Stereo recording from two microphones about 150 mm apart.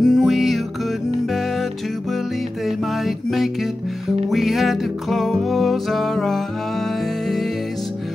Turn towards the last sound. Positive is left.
turn(degrees=0)  # may be behind; listen again after turning